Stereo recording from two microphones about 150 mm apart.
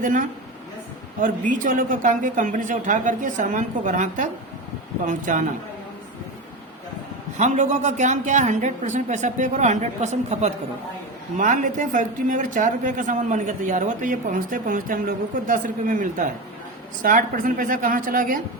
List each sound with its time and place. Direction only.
0.0 s a woman's voice: 60° right (ahead or behind)
7.3 s a woman's voice: 55° right (ahead or behind)